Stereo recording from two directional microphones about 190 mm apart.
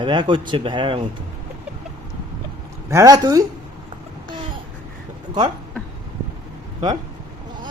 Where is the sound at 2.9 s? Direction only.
20° right (ahead or behind).